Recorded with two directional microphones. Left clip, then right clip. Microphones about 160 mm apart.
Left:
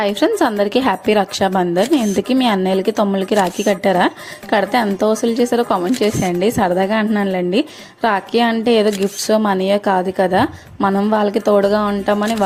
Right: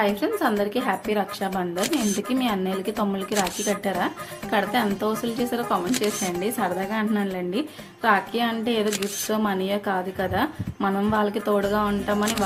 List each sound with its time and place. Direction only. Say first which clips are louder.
0.0 s speech: left 8 dB; 50° left (ahead or behind)
2.0 s speech: left 8 dB; centre (ahead or behind)
2.3 s speech: left 11 dB; 50° left (ahead or behind)